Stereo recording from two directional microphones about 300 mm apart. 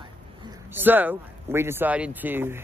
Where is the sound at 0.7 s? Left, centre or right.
Centre.